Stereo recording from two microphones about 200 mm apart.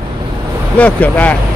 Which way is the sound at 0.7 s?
10° left (ahead or behind).